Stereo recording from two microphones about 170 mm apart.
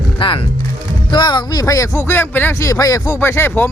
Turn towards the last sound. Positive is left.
turn(degrees=10)  # may be behind; listen again after turning